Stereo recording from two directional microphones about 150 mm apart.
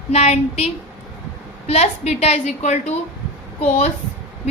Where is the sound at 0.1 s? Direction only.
45° left (ahead or behind).